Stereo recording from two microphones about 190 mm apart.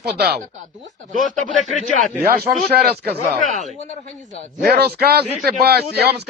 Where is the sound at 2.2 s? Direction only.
55° right (ahead or behind).